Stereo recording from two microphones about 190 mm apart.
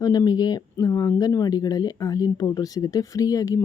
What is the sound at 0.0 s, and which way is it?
Speech, 20° left (ahead or behind).